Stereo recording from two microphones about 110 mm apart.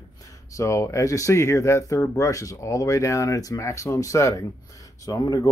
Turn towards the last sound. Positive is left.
turn(degrees=30)  # may be behind; listen again after turning